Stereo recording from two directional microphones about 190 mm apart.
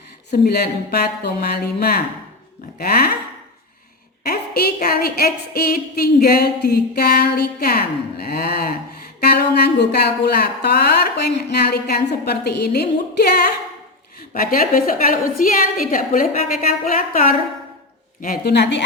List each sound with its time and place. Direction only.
0.3 s a woman's voice: 55° left (ahead or behind)
4.2 s a woman's voice: 55° left (ahead or behind)